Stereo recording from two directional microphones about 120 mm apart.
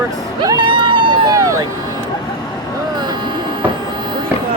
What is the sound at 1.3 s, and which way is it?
Vehicle, 30° right (ahead or behind).